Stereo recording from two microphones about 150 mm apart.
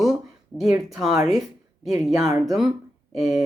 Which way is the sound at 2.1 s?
20° right (ahead or behind).